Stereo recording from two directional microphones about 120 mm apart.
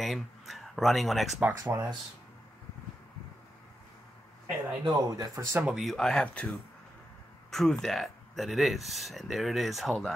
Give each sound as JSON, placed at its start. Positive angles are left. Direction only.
{"t": 0.0, "sound": "speech", "side_deg": 0}
{"t": 1.6, "sound": "speech", "side_deg": -25}
{"t": 4.8, "sound": "speech", "side_deg": -35}
{"t": 5.6, "sound": "speech", "side_deg": 0}
{"t": 7.5, "sound": "speech", "side_deg": 5}